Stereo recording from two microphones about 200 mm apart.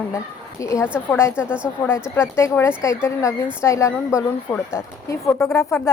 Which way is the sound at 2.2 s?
15° left (ahead or behind).